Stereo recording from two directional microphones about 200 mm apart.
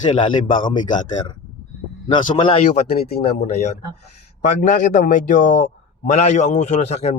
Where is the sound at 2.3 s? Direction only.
25° left (ahead or behind).